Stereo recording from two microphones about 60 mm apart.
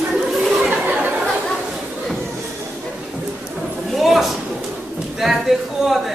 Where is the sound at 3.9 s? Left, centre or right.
Centre.